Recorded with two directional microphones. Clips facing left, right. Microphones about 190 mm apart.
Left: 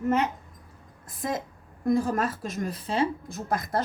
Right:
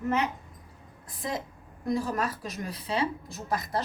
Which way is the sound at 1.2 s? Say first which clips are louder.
Left 3 dB; 50° left (ahead or behind).